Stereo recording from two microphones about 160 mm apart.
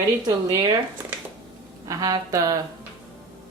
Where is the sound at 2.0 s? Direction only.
25° right (ahead or behind).